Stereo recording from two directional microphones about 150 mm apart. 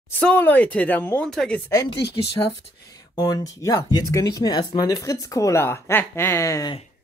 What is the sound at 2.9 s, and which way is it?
Speech, 25° left (ahead or behind).